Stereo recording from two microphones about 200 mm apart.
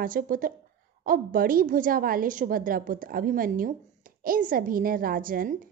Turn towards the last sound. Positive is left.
turn(degrees=-45)  # may be behind; listen again after turning